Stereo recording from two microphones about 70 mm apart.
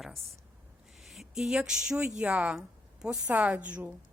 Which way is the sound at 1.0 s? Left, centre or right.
Centre.